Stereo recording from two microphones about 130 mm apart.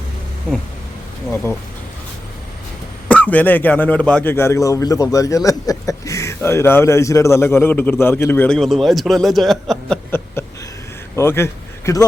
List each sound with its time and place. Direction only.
3.1 s a man's voice: 10° left (ahead or behind)
8.5 s a man's voice: centre (ahead or behind)
11.2 s a man's voice: 20° left (ahead or behind)